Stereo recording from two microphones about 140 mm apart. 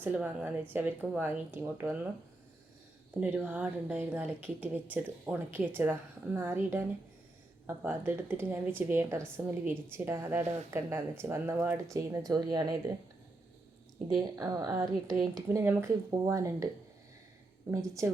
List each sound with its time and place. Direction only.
0.0 s a woman's voice: 10° right (ahead or behind)
3.2 s a woman's voice: 10° right (ahead or behind); by 12.6 s 25° right (ahead or behind)
14.1 s a woman's voice: 25° right (ahead or behind)
17.7 s a woman's voice: 20° right (ahead or behind)